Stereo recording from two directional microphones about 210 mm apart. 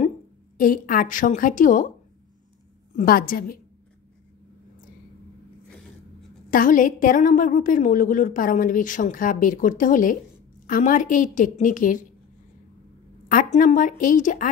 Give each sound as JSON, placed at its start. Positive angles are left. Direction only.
{"t": 0.6, "sound": "a woman's voice", "side_deg": 40}
{"t": 3.0, "sound": "a woman's voice", "side_deg": 45}
{"t": 6.5, "sound": "a woman's voice", "side_deg": 40}
{"t": 13.3, "sound": "a woman's voice", "side_deg": 40}